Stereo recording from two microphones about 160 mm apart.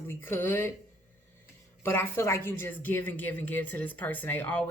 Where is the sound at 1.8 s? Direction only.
15° left (ahead or behind).